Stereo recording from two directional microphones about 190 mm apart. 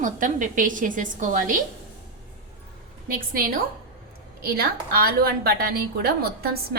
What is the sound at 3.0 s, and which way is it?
A woman's voice, 45° right (ahead or behind).